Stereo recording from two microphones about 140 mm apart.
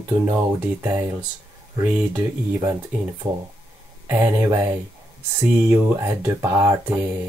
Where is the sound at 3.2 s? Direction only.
30° right (ahead or behind).